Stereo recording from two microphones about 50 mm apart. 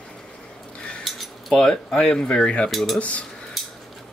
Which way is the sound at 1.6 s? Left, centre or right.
Centre.